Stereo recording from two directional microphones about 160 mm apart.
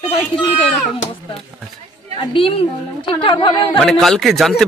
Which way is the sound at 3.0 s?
30° left (ahead or behind).